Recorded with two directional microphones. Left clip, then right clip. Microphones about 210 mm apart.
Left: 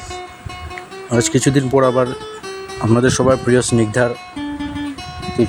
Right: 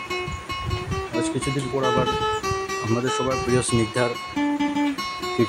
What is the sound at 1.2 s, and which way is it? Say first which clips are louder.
Speech: left 11 dB; 45° left (ahead or behind).